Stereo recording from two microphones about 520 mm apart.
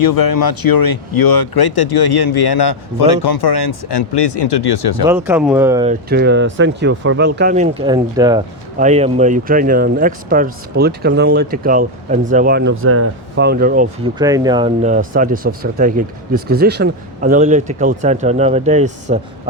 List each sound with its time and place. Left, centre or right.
0.0 s speech: left
5.0 s speech: centre